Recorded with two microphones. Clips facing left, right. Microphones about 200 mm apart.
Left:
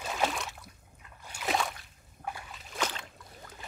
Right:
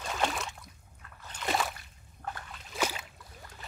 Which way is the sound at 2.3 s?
10° left (ahead or behind).